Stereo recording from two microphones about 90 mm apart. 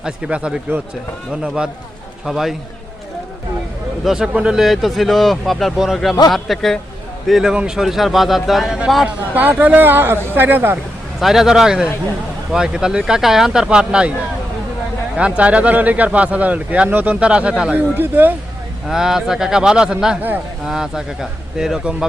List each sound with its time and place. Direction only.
0.0 s speech: 10° right (ahead or behind)
4.0 s speech: 5° right (ahead or behind)
9.3 s speech: 20° right (ahead or behind)
11.2 s speech: 5° right (ahead or behind)
15.1 s speech: 15° right (ahead or behind)
17.9 s speech: 20° right (ahead or behind)
18.9 s speech: 5° right (ahead or behind)